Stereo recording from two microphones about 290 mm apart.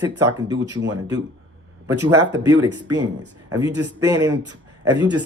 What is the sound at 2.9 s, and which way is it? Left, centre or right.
Speech, right.